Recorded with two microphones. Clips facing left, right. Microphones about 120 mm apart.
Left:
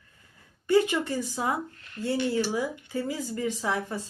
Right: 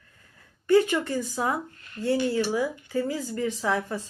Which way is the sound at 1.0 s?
20° left (ahead or behind).